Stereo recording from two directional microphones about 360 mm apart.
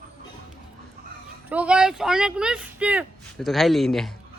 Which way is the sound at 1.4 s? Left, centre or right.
Centre.